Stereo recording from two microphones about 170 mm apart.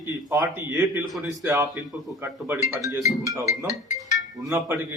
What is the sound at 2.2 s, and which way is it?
A man's voice, 10° right (ahead or behind).